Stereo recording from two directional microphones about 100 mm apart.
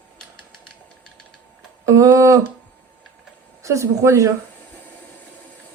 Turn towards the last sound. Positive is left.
turn(degrees=-30)  # may be behind; listen again after turning